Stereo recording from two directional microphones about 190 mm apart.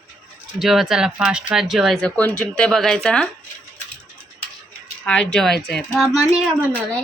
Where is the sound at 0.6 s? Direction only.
Centre (ahead or behind).